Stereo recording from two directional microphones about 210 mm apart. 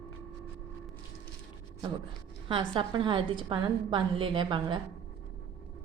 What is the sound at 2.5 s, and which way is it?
A woman's voice, 25° right (ahead or behind).